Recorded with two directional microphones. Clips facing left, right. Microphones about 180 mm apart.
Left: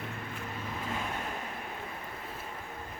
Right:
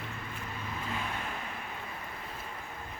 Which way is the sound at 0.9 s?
45° left (ahead or behind).